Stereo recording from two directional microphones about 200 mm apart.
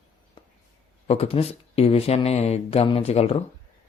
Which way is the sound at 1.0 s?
30° left (ahead or behind).